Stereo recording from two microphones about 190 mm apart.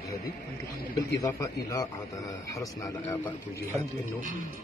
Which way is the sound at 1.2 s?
15° left (ahead or behind).